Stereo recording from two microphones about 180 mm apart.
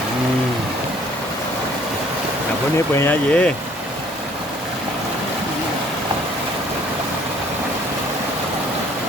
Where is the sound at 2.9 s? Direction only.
10° left (ahead or behind).